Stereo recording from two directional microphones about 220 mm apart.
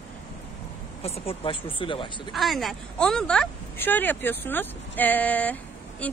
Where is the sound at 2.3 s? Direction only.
Centre (ahead or behind).